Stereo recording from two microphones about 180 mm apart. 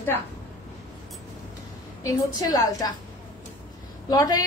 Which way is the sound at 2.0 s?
20° left (ahead or behind).